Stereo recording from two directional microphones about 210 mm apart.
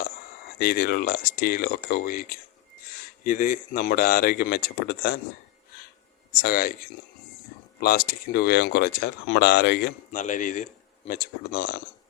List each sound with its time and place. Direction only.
0.6 s speech: 45° left (ahead or behind)
6.4 s speech: 45° left (ahead or behind)
7.8 s speech: 45° left (ahead or behind)
10.2 s speech: 35° left (ahead or behind)